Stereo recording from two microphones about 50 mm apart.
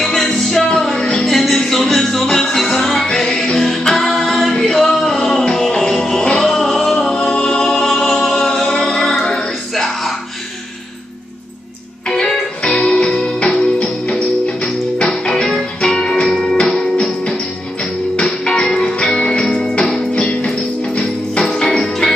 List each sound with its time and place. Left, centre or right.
0.0 s music: centre
7.2 s a capella: centre
8.9 s music: centre
12.1 s music: centre